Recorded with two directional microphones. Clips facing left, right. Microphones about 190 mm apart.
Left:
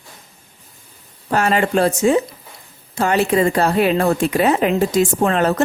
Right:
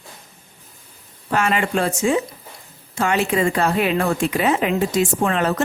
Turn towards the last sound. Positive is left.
turn(degrees=40)  # may be behind; listen again after turning